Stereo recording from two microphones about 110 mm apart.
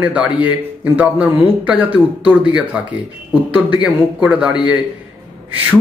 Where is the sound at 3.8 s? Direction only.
10° right (ahead or behind).